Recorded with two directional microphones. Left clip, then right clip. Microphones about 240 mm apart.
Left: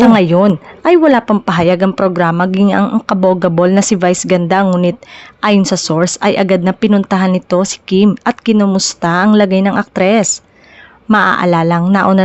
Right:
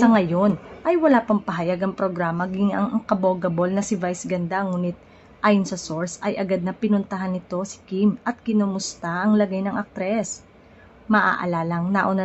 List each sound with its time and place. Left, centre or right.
0.0 s a woman's voice: left